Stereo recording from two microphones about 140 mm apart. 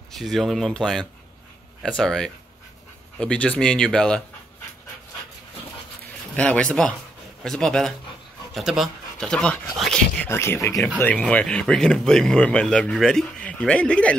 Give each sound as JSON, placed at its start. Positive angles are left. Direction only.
{"t": 0.1, "sound": "speech", "side_deg": 0}
{"t": 6.3, "sound": "speech", "side_deg": 10}
{"t": 10.1, "sound": "speech", "side_deg": 15}
{"t": 11.0, "sound": "speech", "side_deg": 10}